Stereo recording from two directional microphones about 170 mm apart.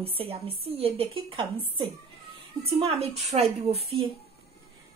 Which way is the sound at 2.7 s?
35° right (ahead or behind).